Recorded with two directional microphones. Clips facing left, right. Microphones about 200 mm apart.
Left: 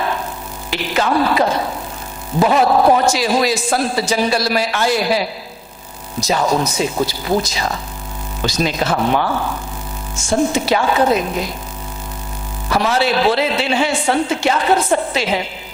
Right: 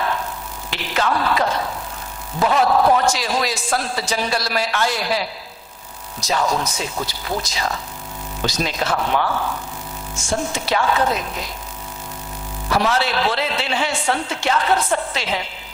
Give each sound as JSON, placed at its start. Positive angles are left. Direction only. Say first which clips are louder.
{"t": 0.7, "sound": "a man's voice", "louder": "left 4 dB", "side_deg": 10}
{"t": 10.5, "sound": "a man's voice", "louder": "left 4 dB", "side_deg": 10}
{"t": 12.9, "sound": "a man's voice", "louder": "left 5 dB", "side_deg": 10}